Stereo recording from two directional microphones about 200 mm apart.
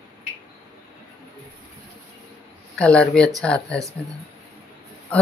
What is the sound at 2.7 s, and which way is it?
Speech, 5° left (ahead or behind).